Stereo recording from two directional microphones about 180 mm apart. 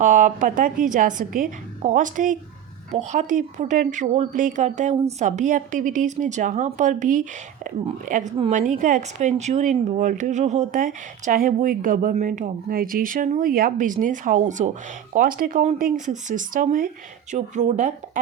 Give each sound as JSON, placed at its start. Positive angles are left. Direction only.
{"t": 0.0, "sound": "speech", "side_deg": -45}